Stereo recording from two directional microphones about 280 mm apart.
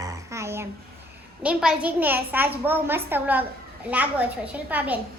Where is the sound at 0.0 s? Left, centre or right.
Centre.